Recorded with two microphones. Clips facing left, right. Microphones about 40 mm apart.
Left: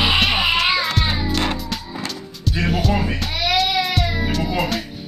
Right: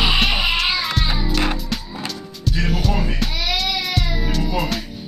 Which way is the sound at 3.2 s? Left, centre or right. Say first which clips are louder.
Right 1 dB; centre.